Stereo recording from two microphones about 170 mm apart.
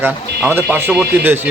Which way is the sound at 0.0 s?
10° right (ahead or behind).